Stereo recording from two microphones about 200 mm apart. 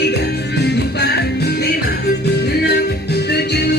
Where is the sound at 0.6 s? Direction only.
55° left (ahead or behind).